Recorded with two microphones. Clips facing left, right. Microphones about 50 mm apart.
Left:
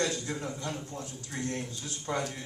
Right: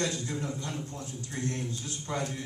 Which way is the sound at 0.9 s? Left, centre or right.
Left.